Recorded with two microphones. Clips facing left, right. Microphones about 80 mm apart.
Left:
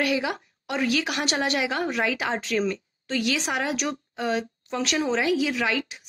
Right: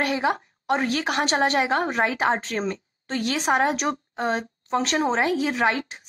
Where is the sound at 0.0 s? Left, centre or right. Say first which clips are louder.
Right 2 dB; right.